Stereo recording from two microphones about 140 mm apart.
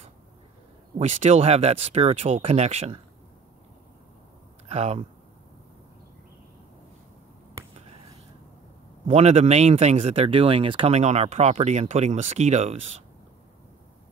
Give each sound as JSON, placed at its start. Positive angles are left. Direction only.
{"t": 0.9, "sound": "speech", "side_deg": -55}
{"t": 4.6, "sound": "speech", "side_deg": -50}
{"t": 9.0, "sound": "speech", "side_deg": -50}